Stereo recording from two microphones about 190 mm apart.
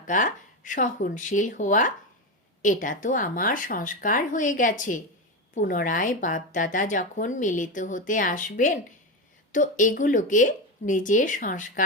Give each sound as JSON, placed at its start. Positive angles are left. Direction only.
{"t": 0.1, "sound": "speech", "side_deg": 45}